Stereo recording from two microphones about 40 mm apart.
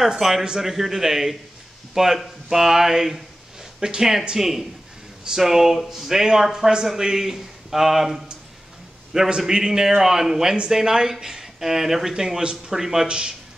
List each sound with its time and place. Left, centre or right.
0.0 s a man's voice: centre